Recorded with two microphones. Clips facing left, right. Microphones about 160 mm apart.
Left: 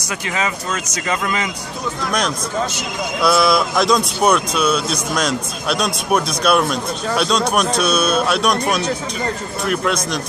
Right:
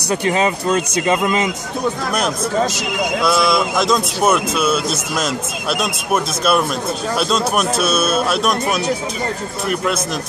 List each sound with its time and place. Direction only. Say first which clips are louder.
0.1 s a man's voice: right 6 dB; 35° right (ahead or behind)
3.2 s a man's voice: left 2 dB; centre (ahead or behind)